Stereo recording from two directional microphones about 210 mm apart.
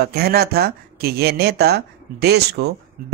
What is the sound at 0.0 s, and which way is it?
Speech, 50° right (ahead or behind).